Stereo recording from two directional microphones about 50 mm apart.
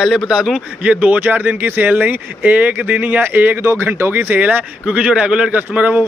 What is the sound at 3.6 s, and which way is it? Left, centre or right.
Speech, right.